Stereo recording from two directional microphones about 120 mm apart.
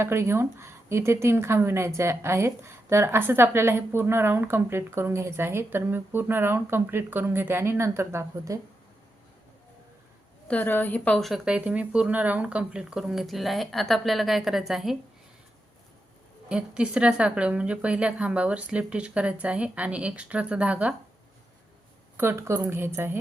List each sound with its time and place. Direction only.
0.0 s a woman's voice: 20° right (ahead or behind)
10.5 s a woman's voice: 15° left (ahead or behind)
11.2 s speech: 5° right (ahead or behind)
16.5 s a woman's voice: 10° right (ahead or behind)
22.2 s a woman's voice: 20° right (ahead or behind)